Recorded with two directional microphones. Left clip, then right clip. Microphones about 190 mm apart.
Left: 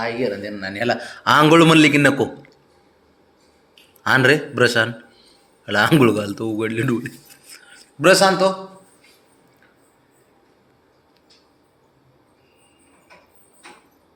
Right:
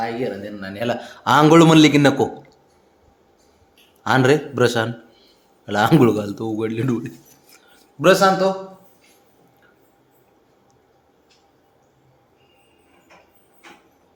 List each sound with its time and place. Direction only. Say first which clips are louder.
0.0 s speech: left 2 dB; 5° left (ahead or behind)
0.7 s a man's voice: left 2 dB; 15° right (ahead or behind)
4.0 s a man's voice: left 1 dB; 15° right (ahead or behind)